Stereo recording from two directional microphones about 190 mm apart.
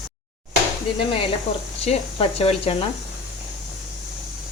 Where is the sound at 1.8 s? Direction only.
30° left (ahead or behind).